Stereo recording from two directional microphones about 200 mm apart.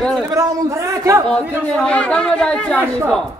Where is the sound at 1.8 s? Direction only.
5° left (ahead or behind).